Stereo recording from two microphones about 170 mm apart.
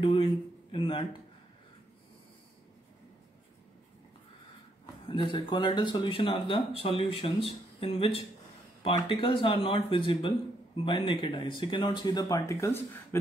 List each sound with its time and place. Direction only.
0.0 s speech: 30° left (ahead or behind)
5.0 s speech: 30° left (ahead or behind); by 13.2 s 15° left (ahead or behind)